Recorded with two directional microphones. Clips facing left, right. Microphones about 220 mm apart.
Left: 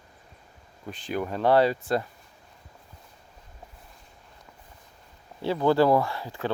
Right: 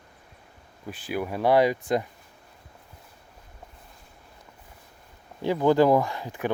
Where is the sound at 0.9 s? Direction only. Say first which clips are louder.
Even; 5° right (ahead or behind).